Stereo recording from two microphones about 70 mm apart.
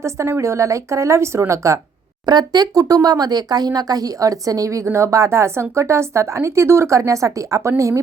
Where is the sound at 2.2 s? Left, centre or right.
Right.